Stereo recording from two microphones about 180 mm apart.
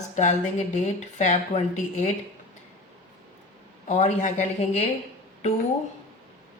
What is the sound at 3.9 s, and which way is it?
Speech, 40° left (ahead or behind).